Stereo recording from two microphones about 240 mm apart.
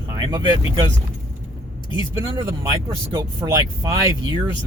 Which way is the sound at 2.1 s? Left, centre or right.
Centre.